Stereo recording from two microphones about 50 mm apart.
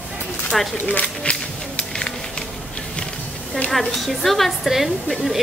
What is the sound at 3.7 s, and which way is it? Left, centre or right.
A woman's voice, centre.